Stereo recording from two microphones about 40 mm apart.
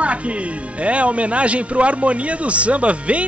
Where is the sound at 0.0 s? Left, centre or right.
Right.